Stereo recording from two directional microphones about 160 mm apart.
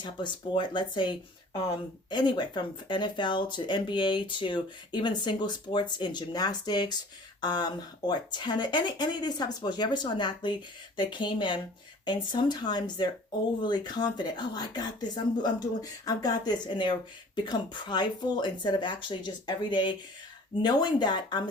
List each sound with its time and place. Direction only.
0.0 s speech: 30° left (ahead or behind)